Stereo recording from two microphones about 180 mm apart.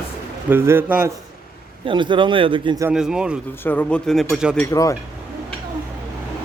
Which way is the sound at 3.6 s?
10° left (ahead or behind).